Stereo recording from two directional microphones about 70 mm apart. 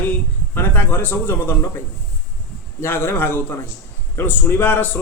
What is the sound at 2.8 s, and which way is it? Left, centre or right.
A man's voice, left.